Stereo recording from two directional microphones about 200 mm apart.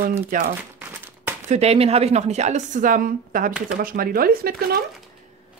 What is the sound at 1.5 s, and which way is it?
A woman's voice, 30° right (ahead or behind).